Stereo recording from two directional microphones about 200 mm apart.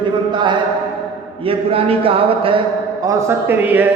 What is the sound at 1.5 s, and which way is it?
A man's voice, 30° right (ahead or behind).